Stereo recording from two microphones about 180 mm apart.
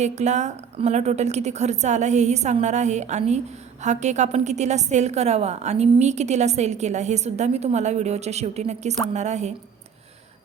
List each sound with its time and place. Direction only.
0.0 s a woman's voice: 40° right (ahead or behind)